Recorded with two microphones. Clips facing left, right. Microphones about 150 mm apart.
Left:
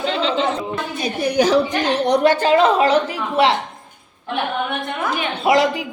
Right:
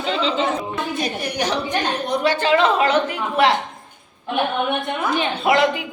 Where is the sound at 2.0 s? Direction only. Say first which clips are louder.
Left 4 dB; 50° left (ahead or behind); by 3.5 s 30° left (ahead or behind).